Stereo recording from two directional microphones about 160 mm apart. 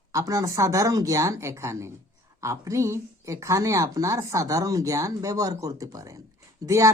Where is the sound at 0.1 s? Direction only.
20° right (ahead or behind).